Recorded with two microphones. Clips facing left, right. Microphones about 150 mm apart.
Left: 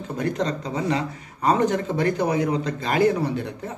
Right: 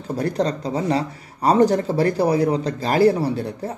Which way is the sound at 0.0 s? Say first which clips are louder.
Right 3 dB; 35° right (ahead or behind).